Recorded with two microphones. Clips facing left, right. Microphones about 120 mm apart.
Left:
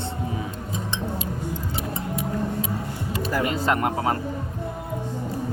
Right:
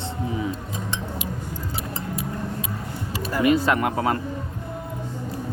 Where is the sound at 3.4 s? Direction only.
30° left (ahead or behind).